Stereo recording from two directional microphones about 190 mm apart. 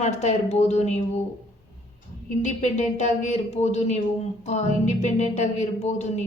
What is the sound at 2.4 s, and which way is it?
A woman's voice, 40° left (ahead or behind).